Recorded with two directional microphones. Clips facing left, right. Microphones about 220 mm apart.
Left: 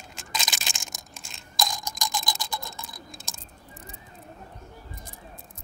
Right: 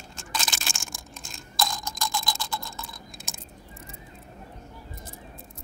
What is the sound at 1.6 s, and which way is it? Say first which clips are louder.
Clock: right 1 dB; 15° left (ahead or behind).